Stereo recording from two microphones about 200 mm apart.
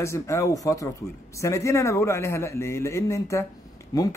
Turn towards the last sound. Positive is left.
turn(degrees=15)  # may be behind; listen again after turning